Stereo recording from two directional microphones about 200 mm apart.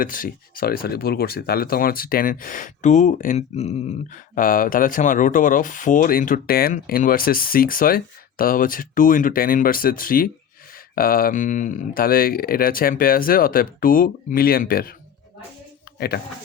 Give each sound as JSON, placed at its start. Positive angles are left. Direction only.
{"t": 0.0, "sound": "speech", "side_deg": 45}
{"t": 16.0, "sound": "speech", "side_deg": 50}